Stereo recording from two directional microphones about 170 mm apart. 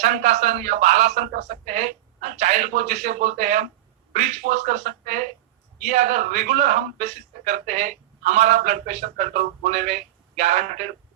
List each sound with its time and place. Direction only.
0.0 s a man's voice: 45° right (ahead or behind)